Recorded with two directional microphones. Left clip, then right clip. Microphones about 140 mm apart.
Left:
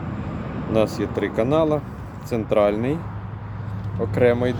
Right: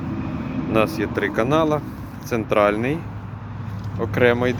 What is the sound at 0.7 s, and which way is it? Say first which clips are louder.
Speech: right 1 dB; 20° left (ahead or behind).